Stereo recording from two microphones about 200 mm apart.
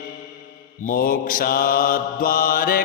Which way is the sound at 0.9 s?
45° left (ahead or behind).